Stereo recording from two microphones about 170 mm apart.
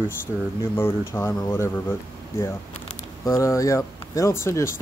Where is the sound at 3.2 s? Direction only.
20° left (ahead or behind).